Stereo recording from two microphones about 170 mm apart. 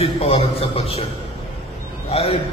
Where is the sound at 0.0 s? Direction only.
35° left (ahead or behind).